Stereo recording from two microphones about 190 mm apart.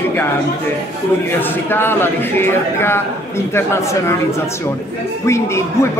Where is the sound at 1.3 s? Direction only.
10° left (ahead or behind).